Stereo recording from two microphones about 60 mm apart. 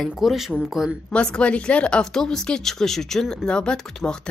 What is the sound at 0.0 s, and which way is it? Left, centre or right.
Speech, centre.